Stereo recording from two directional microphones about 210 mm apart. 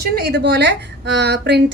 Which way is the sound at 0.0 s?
50° right (ahead or behind).